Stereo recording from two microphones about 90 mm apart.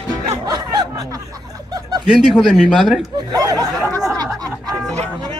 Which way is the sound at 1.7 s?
45° right (ahead or behind).